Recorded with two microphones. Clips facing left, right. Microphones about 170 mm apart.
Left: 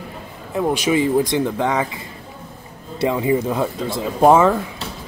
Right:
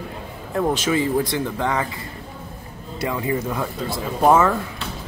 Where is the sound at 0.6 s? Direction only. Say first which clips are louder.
Left 2 dB; 15° left (ahead or behind).